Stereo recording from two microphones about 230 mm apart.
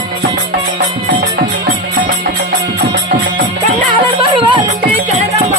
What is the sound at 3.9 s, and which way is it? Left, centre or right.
Music, right.